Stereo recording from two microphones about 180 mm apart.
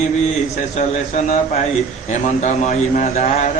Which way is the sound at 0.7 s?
40° left (ahead or behind).